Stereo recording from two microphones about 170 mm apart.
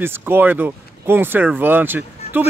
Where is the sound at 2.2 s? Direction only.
40° left (ahead or behind).